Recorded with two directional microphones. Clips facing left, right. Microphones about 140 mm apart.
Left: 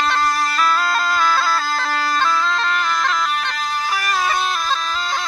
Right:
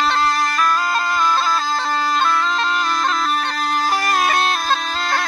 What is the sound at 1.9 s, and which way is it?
Bagpipes, 20° right (ahead or behind).